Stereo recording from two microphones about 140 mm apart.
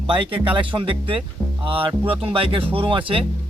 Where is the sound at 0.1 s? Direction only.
40° right (ahead or behind).